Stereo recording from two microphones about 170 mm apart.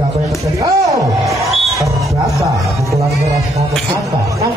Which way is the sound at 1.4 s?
Centre (ahead or behind).